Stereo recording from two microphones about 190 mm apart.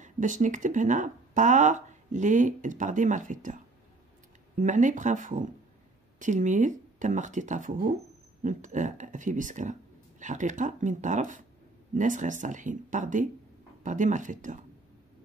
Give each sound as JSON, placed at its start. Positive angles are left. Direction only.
{"t": 0.0, "sound": "speech", "side_deg": -40}